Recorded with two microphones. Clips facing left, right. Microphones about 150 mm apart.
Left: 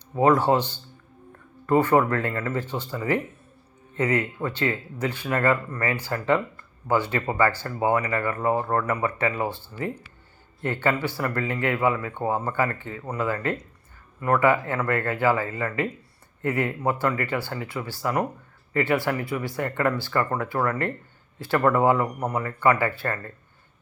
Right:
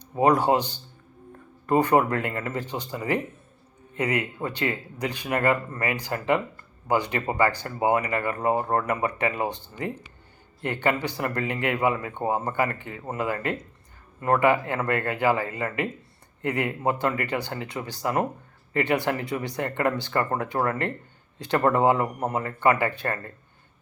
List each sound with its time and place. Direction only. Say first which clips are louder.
0.2 s speech: left 1 dB; 15° right (ahead or behind)